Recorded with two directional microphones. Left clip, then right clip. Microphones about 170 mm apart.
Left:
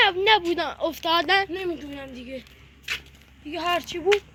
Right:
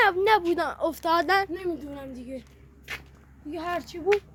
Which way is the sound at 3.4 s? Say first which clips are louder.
Left 5 dB; 15° left (ahead or behind).